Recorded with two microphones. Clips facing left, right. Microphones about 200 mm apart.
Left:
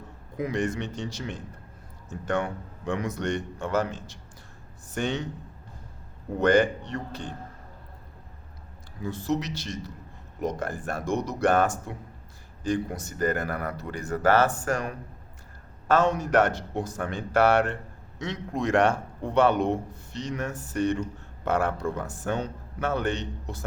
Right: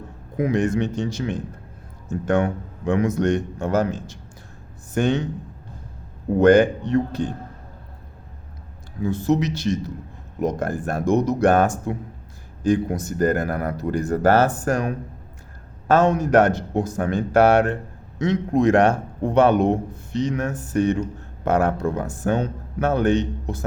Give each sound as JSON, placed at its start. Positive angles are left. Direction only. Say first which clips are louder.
{"t": 0.3, "sound": "a man's voice", "louder": "right 7 dB", "side_deg": -50}
{"t": 6.4, "sound": "a man's voice", "louder": "right 7 dB", "side_deg": -45}
{"t": 9.0, "sound": "a man's voice", "louder": "right 8 dB", "side_deg": -50}